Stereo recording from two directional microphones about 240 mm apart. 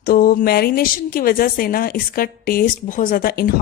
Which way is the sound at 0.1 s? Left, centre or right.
Left.